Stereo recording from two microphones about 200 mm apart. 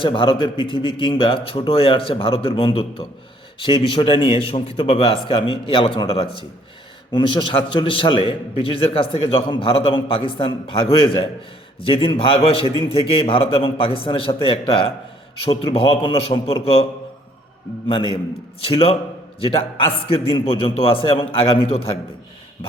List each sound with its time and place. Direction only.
0.0 s a man's voice: 25° left (ahead or behind)
17.8 s a man's voice: 25° left (ahead or behind)